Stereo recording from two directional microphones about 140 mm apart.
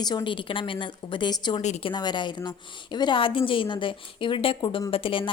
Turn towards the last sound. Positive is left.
turn(degrees=35)  # may be behind; listen again after turning